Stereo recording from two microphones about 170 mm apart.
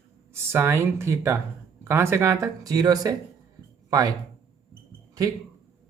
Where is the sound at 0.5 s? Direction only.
15° right (ahead or behind).